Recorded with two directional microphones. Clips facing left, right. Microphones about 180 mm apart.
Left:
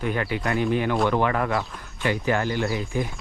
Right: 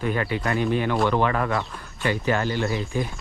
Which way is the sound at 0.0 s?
20° left (ahead or behind).